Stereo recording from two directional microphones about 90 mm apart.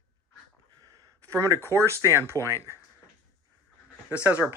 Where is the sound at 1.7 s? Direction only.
35° right (ahead or behind).